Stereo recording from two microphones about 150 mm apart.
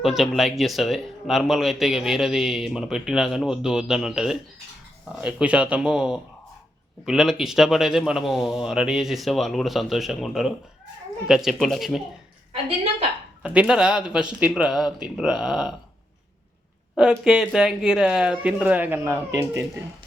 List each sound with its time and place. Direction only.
0.0 s speech: centre (ahead or behind)
13.4 s speech: 10° right (ahead or behind)
17.0 s speech: 5° right (ahead or behind)